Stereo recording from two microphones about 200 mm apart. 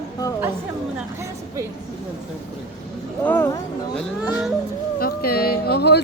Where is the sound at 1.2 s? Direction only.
15° right (ahead or behind).